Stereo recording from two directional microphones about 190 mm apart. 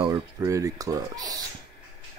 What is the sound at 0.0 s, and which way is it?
Speech, 20° right (ahead or behind).